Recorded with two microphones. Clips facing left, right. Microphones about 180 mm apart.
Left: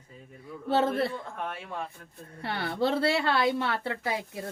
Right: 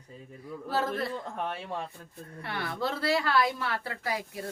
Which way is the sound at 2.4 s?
30° left (ahead or behind).